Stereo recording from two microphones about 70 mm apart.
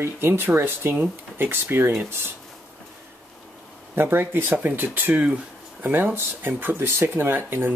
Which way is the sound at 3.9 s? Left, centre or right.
Right.